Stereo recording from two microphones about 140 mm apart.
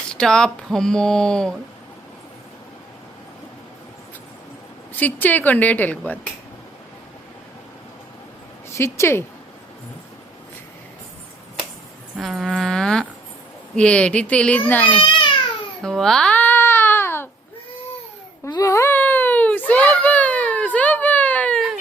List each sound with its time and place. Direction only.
0.1 s speech: 5° left (ahead or behind)
4.9 s a woman's voice: 10° left (ahead or behind)
8.7 s a woman's voice: 20° left (ahead or behind)
12.1 s a woman's voice: centre (ahead or behind)
15.8 s babbling: 5° left (ahead or behind)
18.4 s a sound: 20° left (ahead or behind)